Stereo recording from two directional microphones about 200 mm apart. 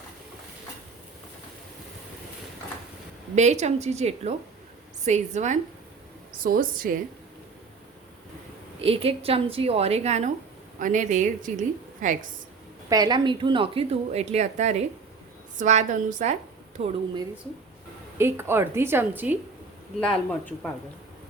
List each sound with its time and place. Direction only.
3.3 s a woman's voice: 35° right (ahead or behind)
8.8 s a woman's voice: 30° right (ahead or behind)
12.9 s a woman's voice: 20° right (ahead or behind); by 16.9 s 40° right (ahead or behind)
18.2 s a woman's voice: 10° right (ahead or behind)
20.0 s speech: 5° left (ahead or behind)